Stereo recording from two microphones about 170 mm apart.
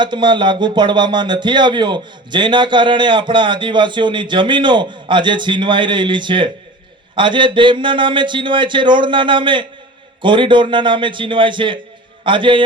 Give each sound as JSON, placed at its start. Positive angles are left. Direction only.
{"t": 0.0, "sound": "speech", "side_deg": -25}